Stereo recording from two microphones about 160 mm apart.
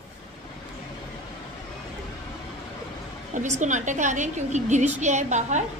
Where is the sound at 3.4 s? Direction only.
50° right (ahead or behind).